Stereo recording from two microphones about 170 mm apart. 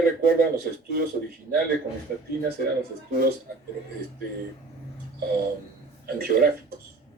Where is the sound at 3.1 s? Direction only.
60° right (ahead or behind).